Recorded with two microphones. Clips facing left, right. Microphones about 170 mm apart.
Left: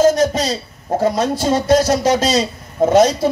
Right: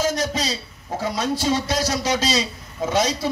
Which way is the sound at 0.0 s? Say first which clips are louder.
Left 9 dB; 50° left (ahead or behind).